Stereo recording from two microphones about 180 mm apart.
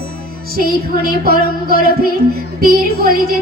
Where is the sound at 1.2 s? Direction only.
60° right (ahead or behind).